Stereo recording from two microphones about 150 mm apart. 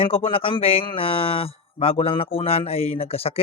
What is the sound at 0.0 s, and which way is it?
A man's voice, 40° left (ahead or behind).